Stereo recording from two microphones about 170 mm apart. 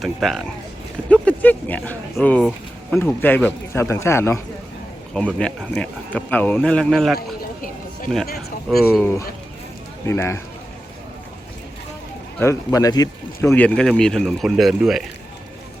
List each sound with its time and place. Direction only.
0.0 s speech: centre (ahead or behind)
5.1 s speech: 5° left (ahead or behind)
8.3 s speech: 65° left (ahead or behind)
9.0 s speech: 10° left (ahead or behind)
12.4 s speech: 20° left (ahead or behind)
13.5 s speech: 5° left (ahead or behind)